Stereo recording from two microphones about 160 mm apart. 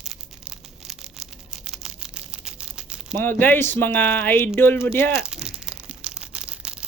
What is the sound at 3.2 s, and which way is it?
Speech, 10° left (ahead or behind).